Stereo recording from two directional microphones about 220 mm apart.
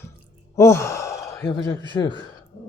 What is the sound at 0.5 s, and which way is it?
Speech, 10° left (ahead or behind).